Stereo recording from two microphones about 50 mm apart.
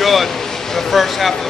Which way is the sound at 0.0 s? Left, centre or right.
Centre.